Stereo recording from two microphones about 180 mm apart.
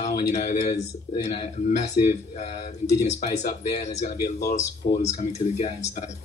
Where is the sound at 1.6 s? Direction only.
40° left (ahead or behind).